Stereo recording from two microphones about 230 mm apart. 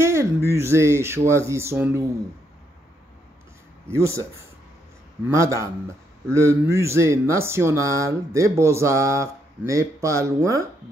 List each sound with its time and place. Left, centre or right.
0.0 s speech: centre
3.8 s speech: centre
5.3 s speech: centre